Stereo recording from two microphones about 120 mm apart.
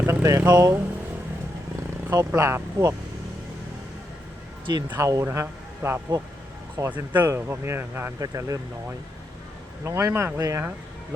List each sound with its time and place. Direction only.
0.0 s speech: 20° right (ahead or behind)
2.0 s speech: 25° right (ahead or behind)
4.9 s speech: 25° right (ahead or behind)
6.9 s speech: 15° right (ahead or behind)
8.2 s speech: 30° right (ahead or behind)
9.8 s speech: 25° right (ahead or behind)